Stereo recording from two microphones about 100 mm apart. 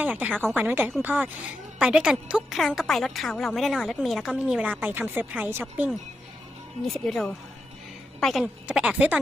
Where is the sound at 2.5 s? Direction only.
Centre (ahead or behind); by 5.9 s 20° right (ahead or behind).